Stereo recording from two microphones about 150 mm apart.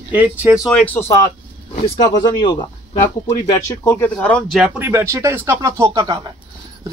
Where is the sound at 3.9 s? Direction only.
10° left (ahead or behind).